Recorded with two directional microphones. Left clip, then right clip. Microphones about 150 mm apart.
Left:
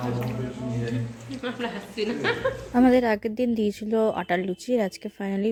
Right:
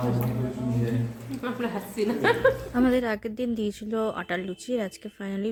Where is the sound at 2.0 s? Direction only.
80° right.